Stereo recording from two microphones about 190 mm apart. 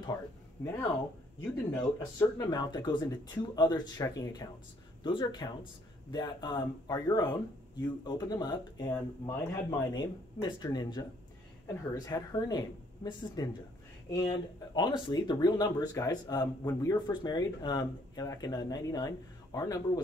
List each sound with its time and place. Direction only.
1.7 s speech: 15° left (ahead or behind)